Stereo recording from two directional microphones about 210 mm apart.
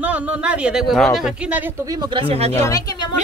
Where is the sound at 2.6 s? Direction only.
15° left (ahead or behind).